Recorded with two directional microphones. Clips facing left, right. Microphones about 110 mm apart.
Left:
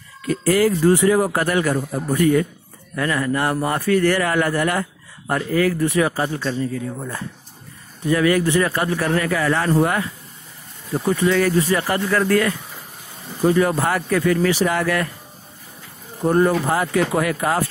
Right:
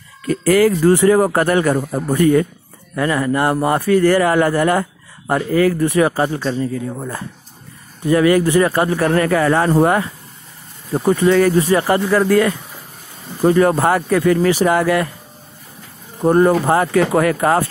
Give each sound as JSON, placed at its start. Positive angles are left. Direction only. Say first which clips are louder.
{"t": 0.5, "sound": "speech", "louder": "right 3 dB", "side_deg": -90}
{"t": 1.0, "sound": "speech", "louder": "right 4 dB", "side_deg": -50}
{"t": 3.0, "sound": "a man's voice", "louder": "right 4 dB", "side_deg": -25}
{"t": 5.8, "sound": "a man's voice", "louder": "right 4 dB", "side_deg": -45}
{"t": 8.9, "sound": "speech", "louder": "right 5 dB", "side_deg": -45}
{"t": 9.8, "sound": "speech", "louder": "right 6 dB", "side_deg": -35}
{"t": 11.1, "sound": "speech", "louder": "right 5 dB", "side_deg": -55}
{"t": 11.3, "sound": "speech", "louder": "right 5 dB", "side_deg": -40}
{"t": 11.8, "sound": "a man's voice", "louder": "right 5 dB", "side_deg": -25}
{"t": 13.4, "sound": "speech", "louder": "right 4 dB", "side_deg": -45}
{"t": 13.8, "sound": "speech", "louder": "right 5 dB", "side_deg": -35}
{"t": 14.7, "sound": "a man's voice", "louder": "right 5 dB", "side_deg": -25}
{"t": 16.3, "sound": "speech", "louder": "right 4 dB", "side_deg": -45}